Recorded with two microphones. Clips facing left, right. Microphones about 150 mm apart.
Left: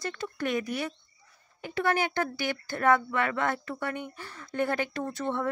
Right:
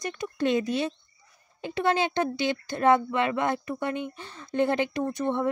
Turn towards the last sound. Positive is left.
turn(degrees=-15)  # may be behind; listen again after turning